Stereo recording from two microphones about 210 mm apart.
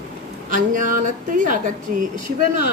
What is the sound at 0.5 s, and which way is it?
Speech, 40° right (ahead or behind).